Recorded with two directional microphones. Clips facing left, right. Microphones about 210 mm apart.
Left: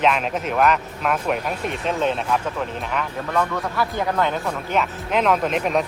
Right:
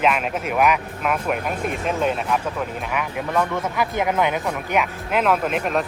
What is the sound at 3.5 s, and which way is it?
Speech, 20° right (ahead or behind).